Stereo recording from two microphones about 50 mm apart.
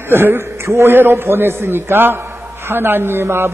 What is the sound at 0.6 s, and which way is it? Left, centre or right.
Speech, right.